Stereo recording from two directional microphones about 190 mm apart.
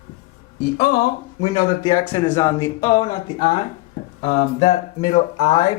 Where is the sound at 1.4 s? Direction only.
20° left (ahead or behind).